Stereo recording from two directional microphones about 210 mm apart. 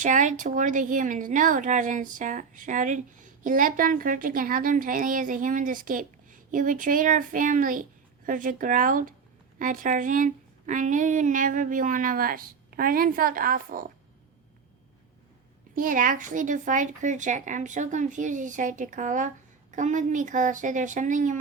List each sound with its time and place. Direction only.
0.0 s a woman's voice: 35° right (ahead or behind)
15.7 s a woman's voice: 40° right (ahead or behind)